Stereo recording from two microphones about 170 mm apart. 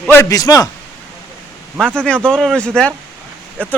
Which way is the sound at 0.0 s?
10° left (ahead or behind).